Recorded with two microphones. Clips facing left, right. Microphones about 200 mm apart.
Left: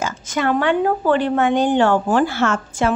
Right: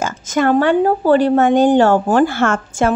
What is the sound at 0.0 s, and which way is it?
A woman's voice, 45° right (ahead or behind).